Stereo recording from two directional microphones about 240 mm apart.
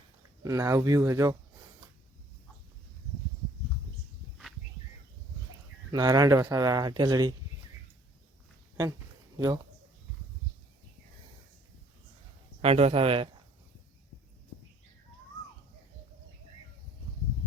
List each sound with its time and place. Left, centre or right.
0.4 s speech: centre
5.9 s speech: centre
12.6 s speech: right